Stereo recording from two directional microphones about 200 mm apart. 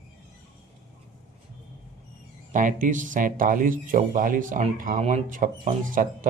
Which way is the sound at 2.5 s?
40° right (ahead or behind).